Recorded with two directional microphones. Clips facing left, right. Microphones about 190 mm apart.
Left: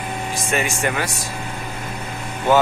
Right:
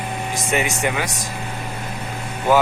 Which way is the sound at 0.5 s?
20° right (ahead or behind).